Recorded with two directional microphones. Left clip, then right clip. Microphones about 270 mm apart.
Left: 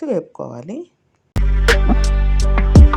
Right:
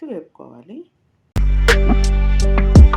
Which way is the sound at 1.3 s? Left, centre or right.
Centre.